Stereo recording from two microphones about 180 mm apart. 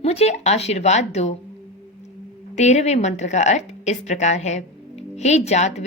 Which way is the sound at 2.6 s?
40° left (ahead or behind).